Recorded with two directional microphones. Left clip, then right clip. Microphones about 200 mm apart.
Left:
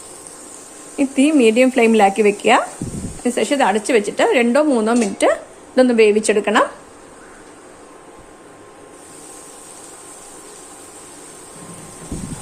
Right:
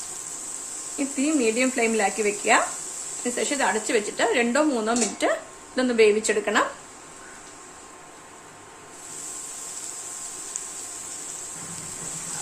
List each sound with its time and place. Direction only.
0.9 s speech: 40° left (ahead or behind)